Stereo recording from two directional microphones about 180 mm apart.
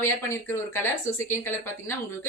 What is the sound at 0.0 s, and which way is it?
Speech, 15° left (ahead or behind).